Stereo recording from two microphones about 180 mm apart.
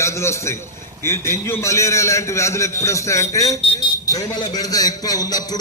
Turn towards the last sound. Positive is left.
turn(degrees=20)  # may be behind; listen again after turning